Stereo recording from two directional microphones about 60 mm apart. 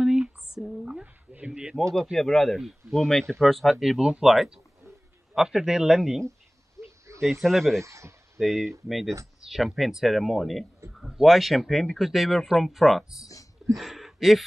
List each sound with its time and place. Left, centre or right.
0.0 s a sound: centre
1.3 s a sound: right
2.1 s speech: centre
4.0 s speech: centre
6.8 s a sound: right
7.4 s speech: centre
7.8 s speech: right
8.4 s speech: centre
13.2 s speech: left
13.7 s speech: centre